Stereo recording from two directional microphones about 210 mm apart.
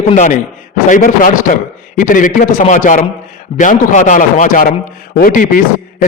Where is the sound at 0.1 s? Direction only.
35° left (ahead or behind).